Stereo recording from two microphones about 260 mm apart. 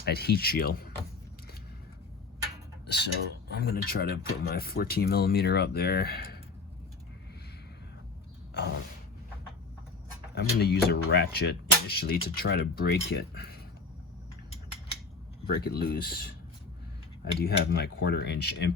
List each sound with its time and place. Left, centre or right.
0.0 s speech: left
2.8 s speech: left
10.3 s speech: left
15.4 s speech: left
17.4 s speech: left